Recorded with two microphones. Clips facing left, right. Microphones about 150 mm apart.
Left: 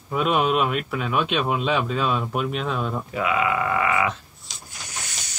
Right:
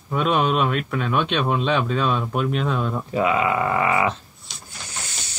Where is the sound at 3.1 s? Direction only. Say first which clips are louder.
Right 3 dB; 30° right (ahead or behind).